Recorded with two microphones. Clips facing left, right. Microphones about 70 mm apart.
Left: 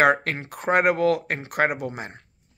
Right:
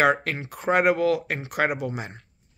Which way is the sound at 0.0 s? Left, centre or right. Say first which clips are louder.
Left 2 dB; left.